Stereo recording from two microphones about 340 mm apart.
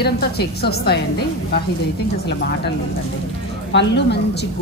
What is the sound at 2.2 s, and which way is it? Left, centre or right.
Speech, left.